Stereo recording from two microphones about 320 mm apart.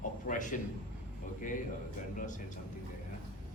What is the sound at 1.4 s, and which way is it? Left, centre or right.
A man's voice, left.